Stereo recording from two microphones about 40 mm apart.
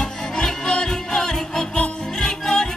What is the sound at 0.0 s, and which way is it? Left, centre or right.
Music, centre.